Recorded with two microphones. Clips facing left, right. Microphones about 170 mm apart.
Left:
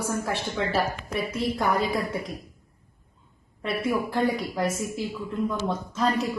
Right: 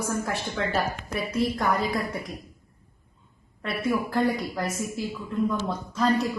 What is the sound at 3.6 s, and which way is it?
Speech, 25° left (ahead or behind).